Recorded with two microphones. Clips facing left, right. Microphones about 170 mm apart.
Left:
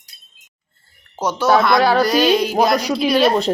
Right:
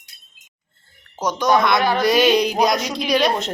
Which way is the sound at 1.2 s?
10° left (ahead or behind).